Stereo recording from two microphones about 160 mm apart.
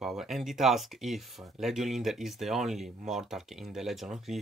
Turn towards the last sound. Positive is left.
turn(degrees=0)  # may be behind; listen again after turning